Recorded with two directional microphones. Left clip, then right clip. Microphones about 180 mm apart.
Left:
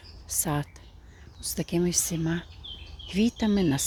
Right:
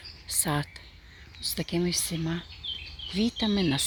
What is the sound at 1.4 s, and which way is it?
Speech, 15° left (ahead or behind).